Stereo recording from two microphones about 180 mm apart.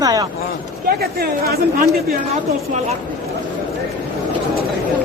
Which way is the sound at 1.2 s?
55° right (ahead or behind).